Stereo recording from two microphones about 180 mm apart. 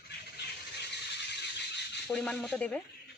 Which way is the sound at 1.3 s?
70° left (ahead or behind).